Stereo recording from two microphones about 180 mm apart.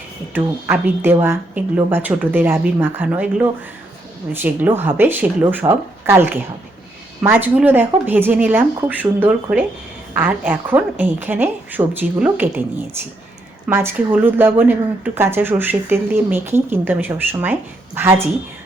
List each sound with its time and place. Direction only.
0.3 s a woman's voice: 10° right (ahead or behind)
13.7 s a woman's voice: 10° right (ahead or behind)